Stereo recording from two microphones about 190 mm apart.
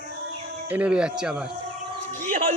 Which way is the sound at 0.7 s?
5° right (ahead or behind).